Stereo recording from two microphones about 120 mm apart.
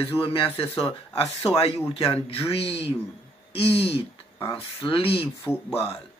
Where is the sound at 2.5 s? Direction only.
55° left (ahead or behind).